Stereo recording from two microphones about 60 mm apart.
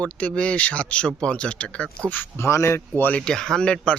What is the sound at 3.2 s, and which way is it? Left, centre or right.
Speech, centre.